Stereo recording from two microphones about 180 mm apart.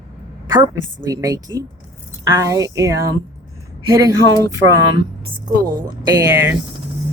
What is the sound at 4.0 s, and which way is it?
Speech, 20° right (ahead or behind).